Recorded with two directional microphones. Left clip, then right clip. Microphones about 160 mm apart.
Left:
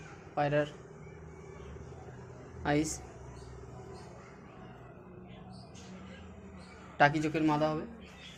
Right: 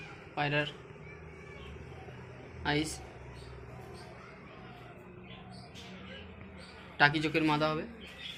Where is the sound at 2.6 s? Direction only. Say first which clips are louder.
Left 1 dB; 90° left.